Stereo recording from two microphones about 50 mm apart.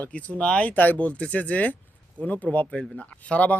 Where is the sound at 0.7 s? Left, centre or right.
Left.